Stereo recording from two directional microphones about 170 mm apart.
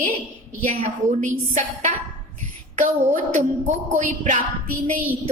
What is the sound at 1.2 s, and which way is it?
A woman's voice, 45° right (ahead or behind).